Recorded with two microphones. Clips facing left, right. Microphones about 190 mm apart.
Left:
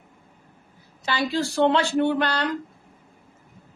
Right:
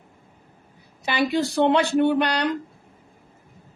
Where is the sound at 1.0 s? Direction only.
15° right (ahead or behind).